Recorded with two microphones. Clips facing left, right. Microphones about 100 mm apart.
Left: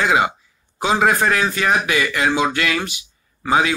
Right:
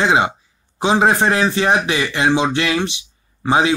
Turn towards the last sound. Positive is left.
turn(degrees=-25)  # may be behind; listen again after turning